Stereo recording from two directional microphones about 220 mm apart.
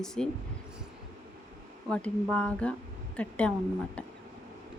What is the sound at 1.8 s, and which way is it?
Speech, 5° left (ahead or behind).